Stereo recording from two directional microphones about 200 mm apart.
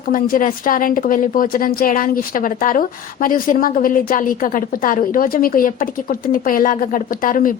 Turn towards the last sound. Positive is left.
turn(degrees=45)  # may be behind; listen again after turning